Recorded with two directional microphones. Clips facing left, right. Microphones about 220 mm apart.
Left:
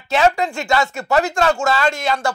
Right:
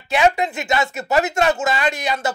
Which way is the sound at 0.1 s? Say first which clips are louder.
Left 1 dB; 15° right (ahead or behind).